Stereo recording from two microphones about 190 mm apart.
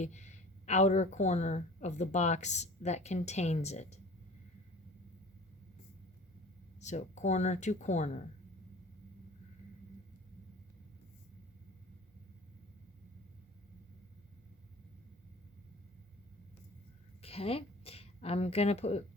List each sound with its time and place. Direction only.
0.0 s a woman's voice: 40° left (ahead or behind)
6.7 s a woman's voice: 35° left (ahead or behind)
17.2 s a woman's voice: 30° left (ahead or behind)